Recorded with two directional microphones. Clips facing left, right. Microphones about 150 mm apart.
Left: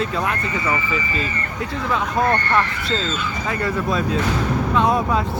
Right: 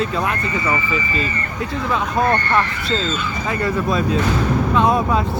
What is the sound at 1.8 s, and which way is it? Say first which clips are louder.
Speech: right 1 dB; 20° right (ahead or behind).